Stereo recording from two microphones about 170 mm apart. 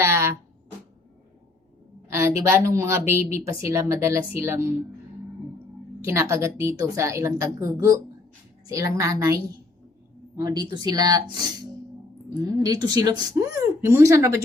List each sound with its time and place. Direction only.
0.0 s a sound: 15° right (ahead or behind)
2.0 s a woman's voice: 15° right (ahead or behind)
6.1 s a woman's voice: 15° right (ahead or behind)
10.4 s a woman's voice: 20° right (ahead or behind)
12.6 s a woman's voice: 20° right (ahead or behind)